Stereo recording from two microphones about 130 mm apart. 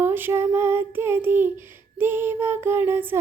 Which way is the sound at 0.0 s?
15° right (ahead or behind).